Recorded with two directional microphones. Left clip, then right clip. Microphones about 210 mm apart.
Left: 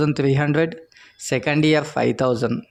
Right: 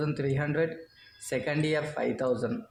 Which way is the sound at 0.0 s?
40° left (ahead or behind).